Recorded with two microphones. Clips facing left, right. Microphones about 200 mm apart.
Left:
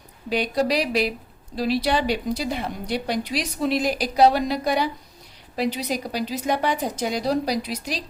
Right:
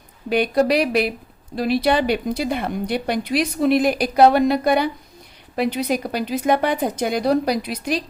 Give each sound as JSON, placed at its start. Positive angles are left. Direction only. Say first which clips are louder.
{"t": 0.3, "sound": "a woman's voice", "louder": "right 5 dB", "side_deg": -55}